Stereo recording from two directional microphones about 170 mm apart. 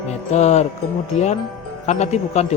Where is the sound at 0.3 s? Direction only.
40° left (ahead or behind).